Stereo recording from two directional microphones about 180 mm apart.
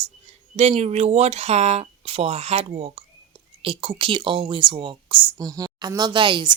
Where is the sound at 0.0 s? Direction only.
35° right (ahead or behind).